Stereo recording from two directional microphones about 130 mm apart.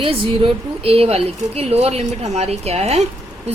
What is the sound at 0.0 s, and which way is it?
A woman's voice, 45° right (ahead or behind).